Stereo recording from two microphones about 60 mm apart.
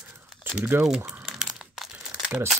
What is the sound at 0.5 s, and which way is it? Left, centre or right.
Crumpling, right.